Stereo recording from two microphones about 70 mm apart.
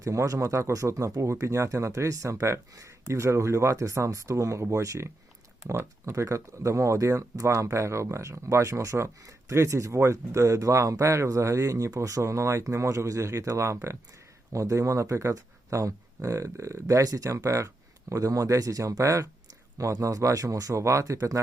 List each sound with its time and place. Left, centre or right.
0.0 s speech: right